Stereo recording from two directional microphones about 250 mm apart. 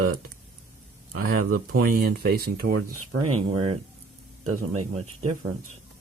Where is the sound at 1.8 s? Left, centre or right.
Right.